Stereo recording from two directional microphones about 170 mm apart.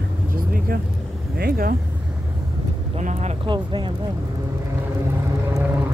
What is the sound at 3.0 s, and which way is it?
Speech, 40° right (ahead or behind).